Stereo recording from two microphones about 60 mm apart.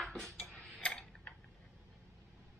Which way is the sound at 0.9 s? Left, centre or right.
Centre.